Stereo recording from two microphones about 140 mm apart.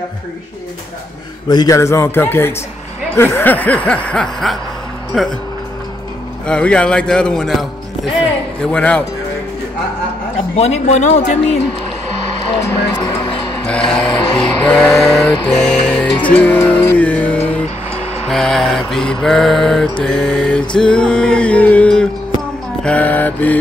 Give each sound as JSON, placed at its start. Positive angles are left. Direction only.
{"t": 1.5, "sound": "a man's voice", "side_deg": 25}
{"t": 5.1, "sound": "mantra", "side_deg": 0}
{"t": 6.4, "sound": "a man's voice", "side_deg": 5}
{"t": 10.3, "sound": "speech", "side_deg": 45}
{"t": 13.7, "sound": "mantra", "side_deg": 5}
{"t": 14.2, "sound": "music", "side_deg": 35}
{"t": 14.6, "sound": "mantra", "side_deg": 5}
{"t": 15.6, "sound": "music", "side_deg": 5}
{"t": 18.3, "sound": "mantra", "side_deg": 0}
{"t": 22.8, "sound": "a man's voice", "side_deg": 10}